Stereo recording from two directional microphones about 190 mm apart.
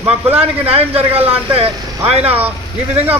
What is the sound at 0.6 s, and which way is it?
A man's voice, 30° right (ahead or behind).